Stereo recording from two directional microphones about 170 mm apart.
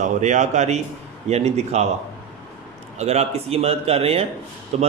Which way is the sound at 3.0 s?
40° right (ahead or behind).